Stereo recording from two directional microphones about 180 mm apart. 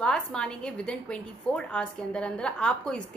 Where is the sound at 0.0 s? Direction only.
5° left (ahead or behind).